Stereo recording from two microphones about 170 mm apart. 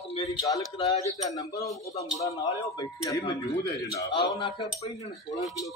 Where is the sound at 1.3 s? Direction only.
20° left (ahead or behind).